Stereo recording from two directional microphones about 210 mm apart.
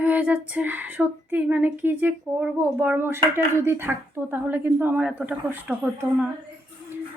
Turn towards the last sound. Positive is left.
turn(degrees=-5)  # may be behind; listen again after turning